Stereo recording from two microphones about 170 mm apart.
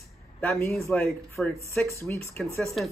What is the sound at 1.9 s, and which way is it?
Speech, 15° left (ahead or behind).